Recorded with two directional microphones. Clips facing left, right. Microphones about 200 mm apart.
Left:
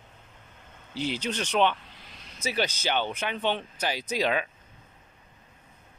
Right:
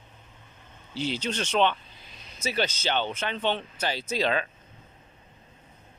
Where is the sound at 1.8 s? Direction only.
80° left.